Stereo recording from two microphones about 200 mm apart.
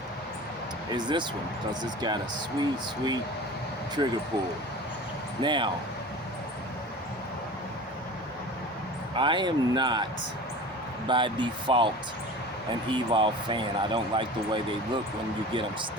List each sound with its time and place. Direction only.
0.9 s speech: 20° right (ahead or behind)
5.4 s speech: 25° right (ahead or behind)
9.1 s speech: 25° right (ahead or behind)
11.1 s speech: 25° right (ahead or behind)
12.9 s speech: 25° right (ahead or behind)